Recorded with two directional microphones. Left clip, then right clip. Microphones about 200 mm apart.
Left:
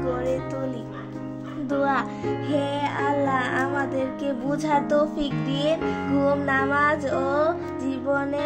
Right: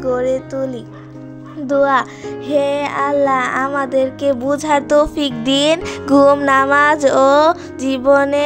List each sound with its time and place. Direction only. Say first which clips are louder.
0.0 s speech: right 9 dB; 30° right (ahead or behind)
1.7 s music: right 10 dB; 35° right (ahead or behind)